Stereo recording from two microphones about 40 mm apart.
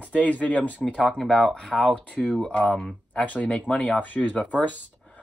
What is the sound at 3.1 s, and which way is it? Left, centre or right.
Speech, left.